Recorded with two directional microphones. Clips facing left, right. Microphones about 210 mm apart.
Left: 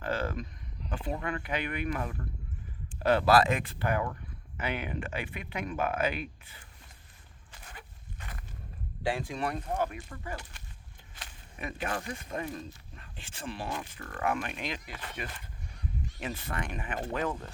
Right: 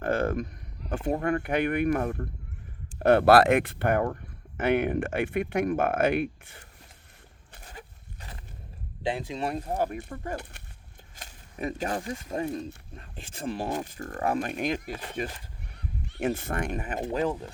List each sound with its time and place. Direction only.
0.0 s speech: 50° right (ahead or behind)
3.0 s speech: 55° right (ahead or behind)
7.8 s zipper: 30° right (ahead or behind)
9.0 s speech: 20° right (ahead or behind)
11.2 s a sound: 40° right (ahead or behind)
11.9 s speech: 30° right (ahead or behind); by 15.0 s 45° right (ahead or behind)
15.2 s speech: 30° right (ahead or behind)
16.0 s speech: 55° right (ahead or behind)